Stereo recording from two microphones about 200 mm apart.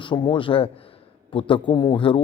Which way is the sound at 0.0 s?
25° left (ahead or behind).